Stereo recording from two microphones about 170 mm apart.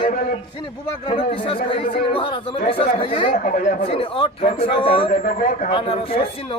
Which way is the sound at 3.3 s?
50° left (ahead or behind).